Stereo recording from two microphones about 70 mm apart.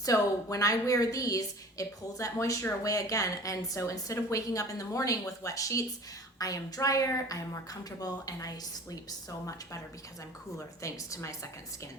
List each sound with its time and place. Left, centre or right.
0.1 s a woman's voice: left
10.8 s a woman's voice: left